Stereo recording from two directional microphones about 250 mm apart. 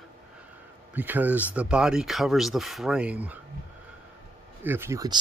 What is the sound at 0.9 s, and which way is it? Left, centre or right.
Speech, centre.